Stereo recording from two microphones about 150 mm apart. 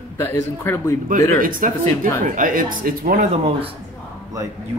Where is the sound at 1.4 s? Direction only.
65° right (ahead or behind).